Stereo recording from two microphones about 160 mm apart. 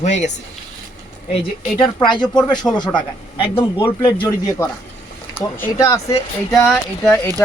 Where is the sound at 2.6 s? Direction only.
10° left (ahead or behind).